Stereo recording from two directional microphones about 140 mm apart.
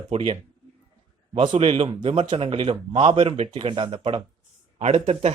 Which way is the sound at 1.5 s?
45° right (ahead or behind).